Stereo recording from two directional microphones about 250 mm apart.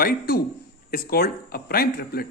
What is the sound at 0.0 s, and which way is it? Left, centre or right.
A man's voice, left.